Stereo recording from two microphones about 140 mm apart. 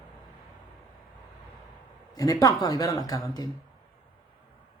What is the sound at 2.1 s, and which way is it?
Speech, 25° left (ahead or behind).